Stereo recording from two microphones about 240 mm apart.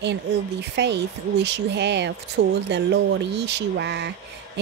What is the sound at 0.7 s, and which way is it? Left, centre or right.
Speech, right.